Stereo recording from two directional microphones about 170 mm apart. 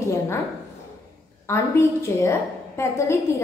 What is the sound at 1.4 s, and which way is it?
A woman's voice, 15° left (ahead or behind).